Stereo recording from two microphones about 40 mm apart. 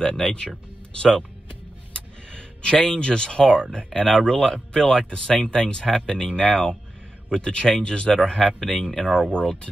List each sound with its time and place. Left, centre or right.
0.0 s speech: centre
8.2 s speech: centre